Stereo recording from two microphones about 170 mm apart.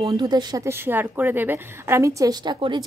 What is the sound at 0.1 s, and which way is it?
A woman's voice, 25° right (ahead or behind).